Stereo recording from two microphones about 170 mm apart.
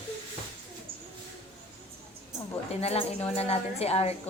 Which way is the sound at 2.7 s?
35° left (ahead or behind).